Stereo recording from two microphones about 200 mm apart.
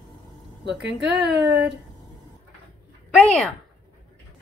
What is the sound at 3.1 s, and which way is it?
Speech, 5° left (ahead or behind).